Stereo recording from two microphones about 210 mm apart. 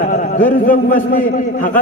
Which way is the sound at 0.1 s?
40° left (ahead or behind).